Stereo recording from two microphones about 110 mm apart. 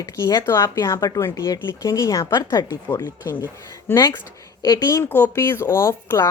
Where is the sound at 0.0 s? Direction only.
35° left (ahead or behind).